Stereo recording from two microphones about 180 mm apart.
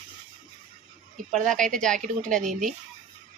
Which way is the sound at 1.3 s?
5° left (ahead or behind).